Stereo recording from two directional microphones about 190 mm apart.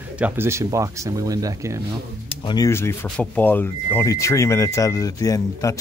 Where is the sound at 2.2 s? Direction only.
25° left (ahead or behind).